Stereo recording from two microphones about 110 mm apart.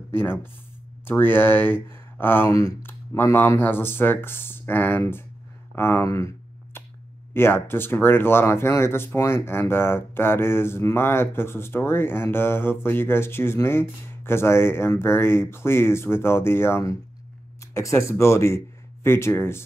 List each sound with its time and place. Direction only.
0.1 s speech: 20° left (ahead or behind)
2.5 s speech: 30° left (ahead or behind)